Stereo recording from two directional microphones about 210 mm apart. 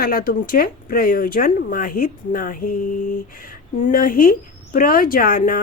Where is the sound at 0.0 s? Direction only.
45° left (ahead or behind).